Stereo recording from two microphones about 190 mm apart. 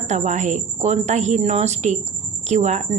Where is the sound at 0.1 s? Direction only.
40° right (ahead or behind).